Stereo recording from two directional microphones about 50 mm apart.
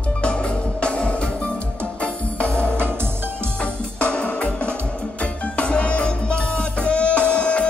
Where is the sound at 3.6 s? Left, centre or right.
Left.